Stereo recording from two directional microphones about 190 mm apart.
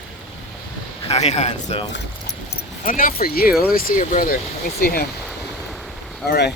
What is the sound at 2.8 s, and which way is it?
Speech, 45° left (ahead or behind).